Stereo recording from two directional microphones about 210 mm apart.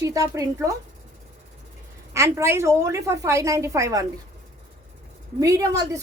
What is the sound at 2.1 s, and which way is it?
Speech, 15° right (ahead or behind).